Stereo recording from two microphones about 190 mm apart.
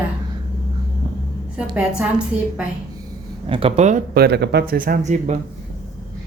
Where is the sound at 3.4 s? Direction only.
30° right (ahead or behind).